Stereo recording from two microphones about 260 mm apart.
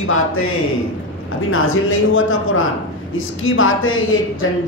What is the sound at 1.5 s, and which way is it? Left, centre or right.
A woman's voice, left.